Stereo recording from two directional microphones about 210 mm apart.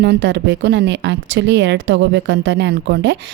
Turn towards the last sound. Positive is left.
turn(degrees=-60)  # may be behind; listen again after turning